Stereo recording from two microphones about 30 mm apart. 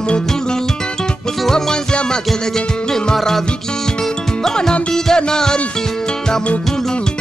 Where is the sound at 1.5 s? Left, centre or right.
Centre.